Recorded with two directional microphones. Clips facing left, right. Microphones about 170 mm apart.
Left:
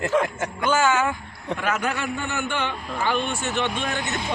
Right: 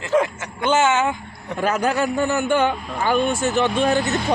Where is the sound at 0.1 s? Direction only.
5° right (ahead or behind).